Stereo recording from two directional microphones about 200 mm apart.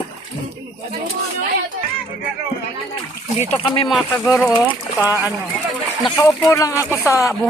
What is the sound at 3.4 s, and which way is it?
Speech, 30° left (ahead or behind).